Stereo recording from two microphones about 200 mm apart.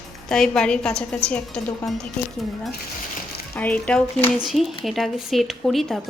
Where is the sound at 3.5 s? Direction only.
5° left (ahead or behind).